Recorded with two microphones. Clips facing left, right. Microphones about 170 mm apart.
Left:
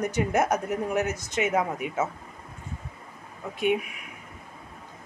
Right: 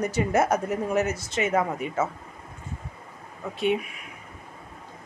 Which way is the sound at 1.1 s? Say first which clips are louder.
Even; 15° left (ahead or behind).